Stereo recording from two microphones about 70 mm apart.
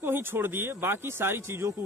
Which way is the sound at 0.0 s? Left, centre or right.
Right.